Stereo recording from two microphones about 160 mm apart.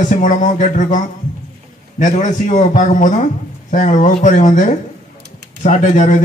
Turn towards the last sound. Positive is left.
turn(degrees=50)  # may be behind; listen again after turning